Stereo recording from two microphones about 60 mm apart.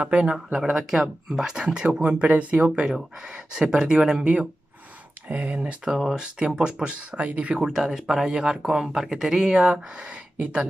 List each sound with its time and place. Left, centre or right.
0.0 s speech: centre
7.5 s speech: centre